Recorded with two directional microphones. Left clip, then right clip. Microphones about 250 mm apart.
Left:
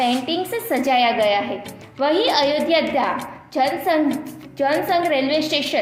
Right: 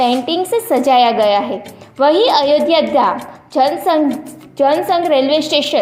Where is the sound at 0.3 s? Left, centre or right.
Right.